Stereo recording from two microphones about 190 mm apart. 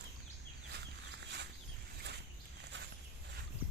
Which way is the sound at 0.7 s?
65° right (ahead or behind).